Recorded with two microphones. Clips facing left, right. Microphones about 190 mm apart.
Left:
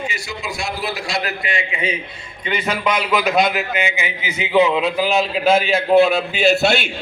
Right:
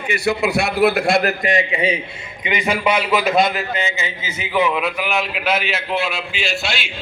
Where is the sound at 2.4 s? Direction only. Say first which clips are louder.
Right 1 dB; 15° right (ahead or behind); by 5.8 s 30° left (ahead or behind).